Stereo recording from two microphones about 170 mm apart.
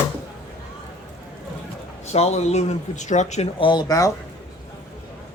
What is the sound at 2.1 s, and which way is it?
Speech, 40° left (ahead or behind).